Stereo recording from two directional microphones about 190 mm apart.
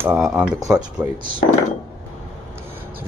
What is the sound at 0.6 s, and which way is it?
Speech, 20° right (ahead or behind).